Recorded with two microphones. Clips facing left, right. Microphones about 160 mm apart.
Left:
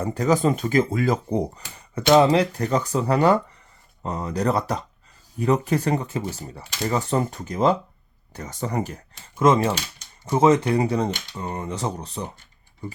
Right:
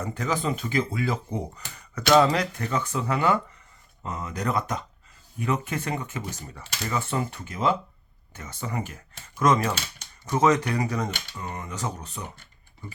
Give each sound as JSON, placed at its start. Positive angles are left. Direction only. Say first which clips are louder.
{"t": 0.0, "sound": "speech", "louder": "left 7 dB", "side_deg": 35}
{"t": 9.4, "sound": "speech", "louder": "left 4 dB", "side_deg": 25}